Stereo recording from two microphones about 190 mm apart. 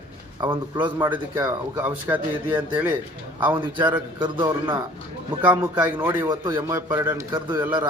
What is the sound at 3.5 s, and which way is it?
A man's voice, 25° right (ahead or behind).